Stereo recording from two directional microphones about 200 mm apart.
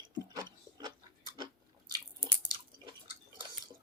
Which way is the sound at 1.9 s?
20° right (ahead or behind).